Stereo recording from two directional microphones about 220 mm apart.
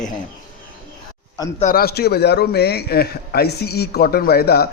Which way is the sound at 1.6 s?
45° left (ahead or behind).